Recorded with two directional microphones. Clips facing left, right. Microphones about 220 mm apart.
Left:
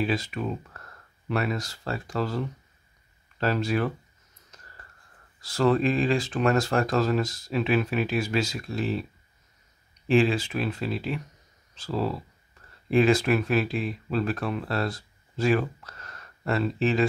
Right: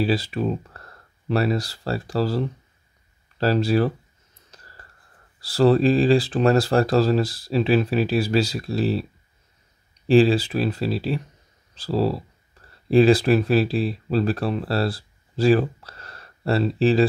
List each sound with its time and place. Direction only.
0.0 s speech: 35° right (ahead or behind)
4.5 s whispering: 35° right (ahead or behind)
5.4 s speech: 35° right (ahead or behind)
10.0 s speech: 35° right (ahead or behind)